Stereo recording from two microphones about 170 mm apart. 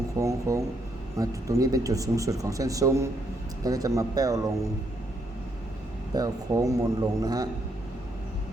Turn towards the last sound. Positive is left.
turn(degrees=-20)  # may be behind; listen again after turning